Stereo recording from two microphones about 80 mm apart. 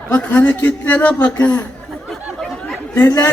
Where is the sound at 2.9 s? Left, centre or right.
Left.